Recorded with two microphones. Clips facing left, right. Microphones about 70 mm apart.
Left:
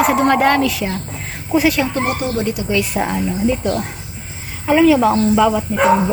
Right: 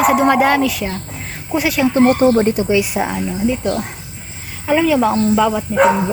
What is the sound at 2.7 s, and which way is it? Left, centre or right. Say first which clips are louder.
Speech: right 3 dB; centre.